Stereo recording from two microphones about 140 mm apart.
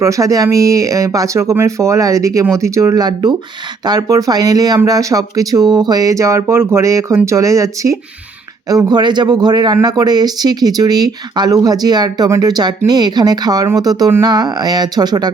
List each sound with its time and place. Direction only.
0.0 s speech: 25° right (ahead or behind)